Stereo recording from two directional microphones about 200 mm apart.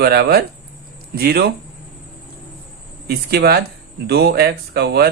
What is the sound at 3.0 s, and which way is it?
Speech, 55° right (ahead or behind).